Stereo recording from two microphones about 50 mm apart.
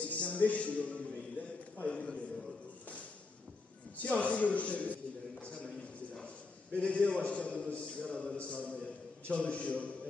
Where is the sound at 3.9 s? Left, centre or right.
Left.